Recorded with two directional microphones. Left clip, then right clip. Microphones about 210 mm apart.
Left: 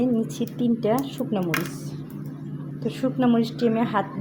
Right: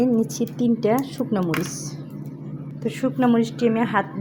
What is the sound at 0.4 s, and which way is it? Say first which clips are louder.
A woman's voice: right 1 dB; 20° right (ahead or behind).